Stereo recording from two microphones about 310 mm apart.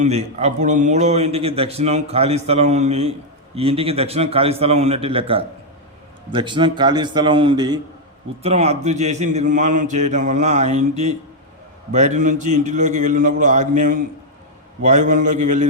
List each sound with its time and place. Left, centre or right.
0.0 s a man's voice: right